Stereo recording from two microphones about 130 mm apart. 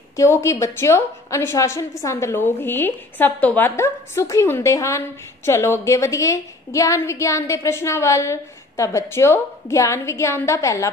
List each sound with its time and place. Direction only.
0.1 s a woman's voice: 20° left (ahead or behind)